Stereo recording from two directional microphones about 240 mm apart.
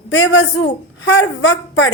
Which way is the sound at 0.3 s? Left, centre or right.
Left.